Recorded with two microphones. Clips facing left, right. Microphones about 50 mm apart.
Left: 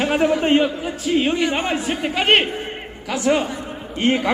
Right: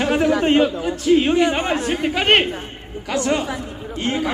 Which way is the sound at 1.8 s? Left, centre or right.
Centre.